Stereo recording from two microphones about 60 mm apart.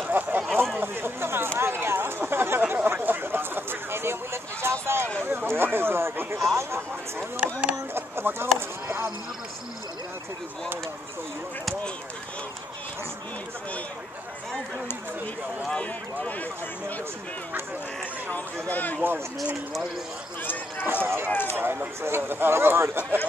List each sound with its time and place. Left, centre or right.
0.2 s speech: right
0.7 s chatter: right
2.7 s a sound: right
5.2 s speech: right
15.7 s run: left
18.3 s speech: left
18.9 s speech: right
20.8 s speech: right
21.3 s a sound: left
21.5 s speech: right